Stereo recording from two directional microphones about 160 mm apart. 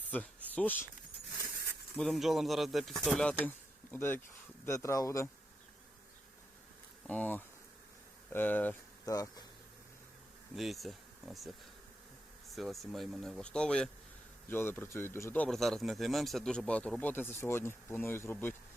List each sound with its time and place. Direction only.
0.1 s speech: 10° left (ahead or behind)
2.0 s speech: centre (ahead or behind); by 5.3 s 20° left (ahead or behind)
7.1 s speech: 10° left (ahead or behind)
9.1 s speech: 20° left (ahead or behind)
10.5 s speech: centre (ahead or behind)